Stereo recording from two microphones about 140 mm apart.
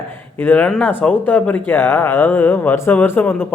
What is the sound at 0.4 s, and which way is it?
Speech, 10° left (ahead or behind).